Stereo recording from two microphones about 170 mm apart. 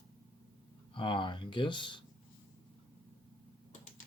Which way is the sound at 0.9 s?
30° left (ahead or behind).